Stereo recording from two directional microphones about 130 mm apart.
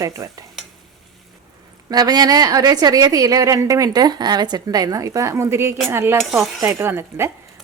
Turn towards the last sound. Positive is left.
turn(degrees=-20)  # may be behind; listen again after turning